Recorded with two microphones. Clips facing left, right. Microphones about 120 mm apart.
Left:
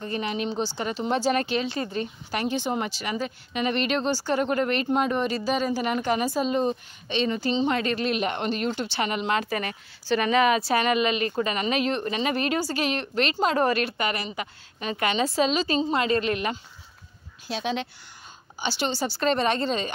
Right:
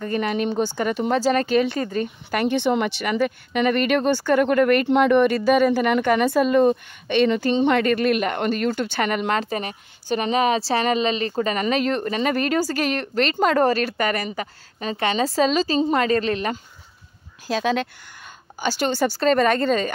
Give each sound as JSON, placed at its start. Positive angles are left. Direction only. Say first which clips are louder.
{"t": 0.0, "sound": "a woman's voice", "louder": "right 5 dB", "side_deg": -50}
{"t": 9.4, "sound": "a woman's voice", "louder": "right 2 dB", "side_deg": -30}
{"t": 13.7, "sound": "a woman's voice", "louder": "right 4 dB", "side_deg": -40}
{"t": 17.7, "sound": "a woman's voice", "louder": "right 6 dB", "side_deg": -50}